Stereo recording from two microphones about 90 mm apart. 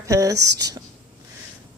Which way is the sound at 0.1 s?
35° right (ahead or behind).